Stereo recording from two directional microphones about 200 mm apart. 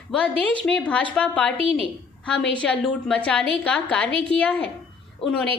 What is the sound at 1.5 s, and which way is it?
Speech, 25° right (ahead or behind).